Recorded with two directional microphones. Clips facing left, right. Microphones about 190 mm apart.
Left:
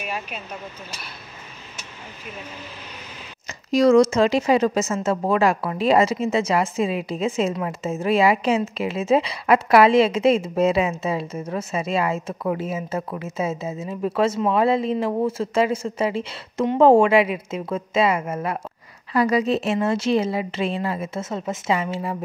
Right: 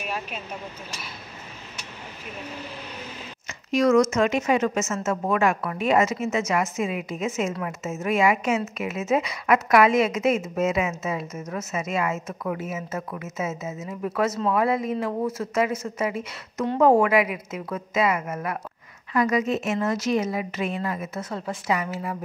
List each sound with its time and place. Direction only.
0.0 s vehicle: 5° left (ahead or behind)
3.4 s a woman's voice: 35° left (ahead or behind)